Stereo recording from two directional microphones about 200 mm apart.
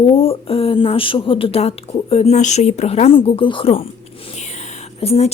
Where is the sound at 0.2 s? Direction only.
30° left (ahead or behind).